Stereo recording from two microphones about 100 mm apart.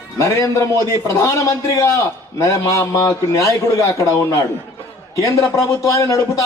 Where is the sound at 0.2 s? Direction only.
30° left (ahead or behind).